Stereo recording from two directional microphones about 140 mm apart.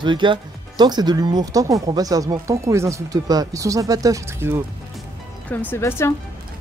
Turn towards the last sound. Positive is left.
turn(degrees=20)  # may be behind; listen again after turning